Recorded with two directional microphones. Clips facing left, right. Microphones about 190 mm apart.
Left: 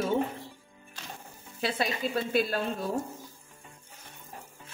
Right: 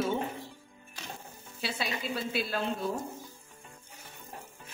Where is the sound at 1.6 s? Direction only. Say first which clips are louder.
Left 5 dB; 50° left (ahead or behind).